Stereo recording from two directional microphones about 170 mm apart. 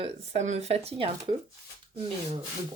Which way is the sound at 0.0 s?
40° right (ahead or behind).